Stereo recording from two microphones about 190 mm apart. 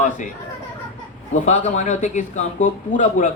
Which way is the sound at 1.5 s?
40° left (ahead or behind).